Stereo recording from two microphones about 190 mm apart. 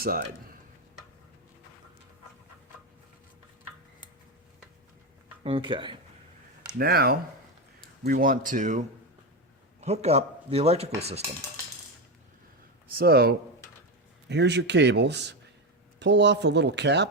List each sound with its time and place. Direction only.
0.0 s speech: 50° right (ahead or behind)
5.4 s speech: 30° right (ahead or behind)
6.7 s speech: 55° right (ahead or behind)
9.8 s speech: 35° right (ahead or behind)
12.9 s speech: 55° right (ahead or behind)